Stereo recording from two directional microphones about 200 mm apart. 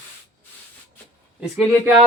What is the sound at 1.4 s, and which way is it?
Speech, 5° right (ahead or behind).